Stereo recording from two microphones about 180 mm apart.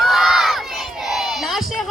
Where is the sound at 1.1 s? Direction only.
Centre (ahead or behind).